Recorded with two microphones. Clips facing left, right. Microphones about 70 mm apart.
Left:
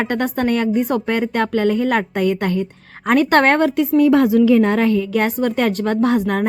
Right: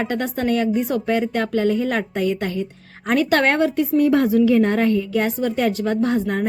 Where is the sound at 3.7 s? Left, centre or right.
Left.